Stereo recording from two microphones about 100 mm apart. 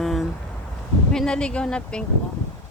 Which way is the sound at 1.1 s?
10° left (ahead or behind).